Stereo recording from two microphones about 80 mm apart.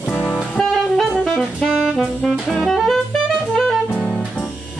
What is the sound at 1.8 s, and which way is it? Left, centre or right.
Saxophone, centre.